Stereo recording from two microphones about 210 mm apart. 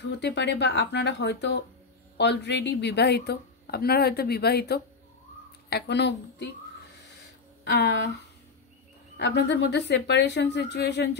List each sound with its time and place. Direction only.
0.0 s a woman's voice: 55° left (ahead or behind)
7.7 s speech: 55° left (ahead or behind)
9.1 s speech: 55° left (ahead or behind)